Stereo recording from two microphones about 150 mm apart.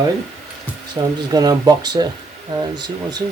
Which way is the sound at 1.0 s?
10° right (ahead or behind).